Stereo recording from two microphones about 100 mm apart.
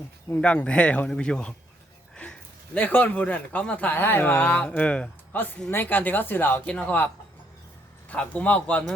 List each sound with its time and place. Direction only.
0.4 s speech: 10° left (ahead or behind)
2.7 s speech: 15° left (ahead or behind)
8.1 s speech: 15° left (ahead or behind)